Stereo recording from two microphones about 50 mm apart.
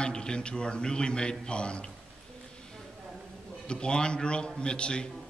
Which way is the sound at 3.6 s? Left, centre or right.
Centre.